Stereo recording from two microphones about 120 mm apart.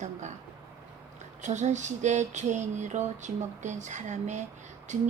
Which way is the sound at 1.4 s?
75° right (ahead or behind).